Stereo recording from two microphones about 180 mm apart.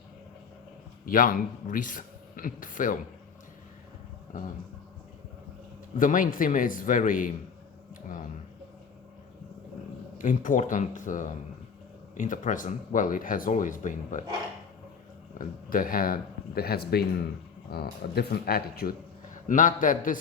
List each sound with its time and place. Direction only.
1.0 s speech: 50° left (ahead or behind)
6.0 s speech: 50° left (ahead or behind)
10.2 s speech: 45° left (ahead or behind)
15.4 s a man's voice: 50° left (ahead or behind)